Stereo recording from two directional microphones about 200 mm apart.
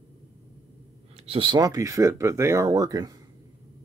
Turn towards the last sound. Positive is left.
turn(degrees=-20)  # may be behind; listen again after turning